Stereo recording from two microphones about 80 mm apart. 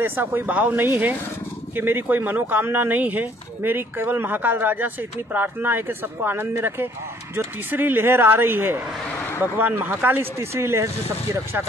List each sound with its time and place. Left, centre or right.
0.0 s speech: right